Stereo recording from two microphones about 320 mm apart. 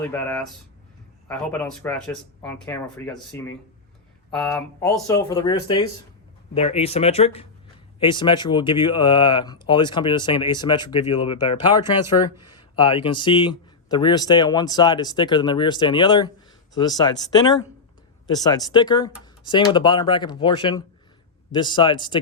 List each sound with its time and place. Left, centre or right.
0.0 s speech: centre